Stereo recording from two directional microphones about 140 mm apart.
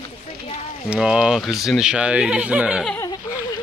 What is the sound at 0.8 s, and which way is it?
Speech, 5° right (ahead or behind).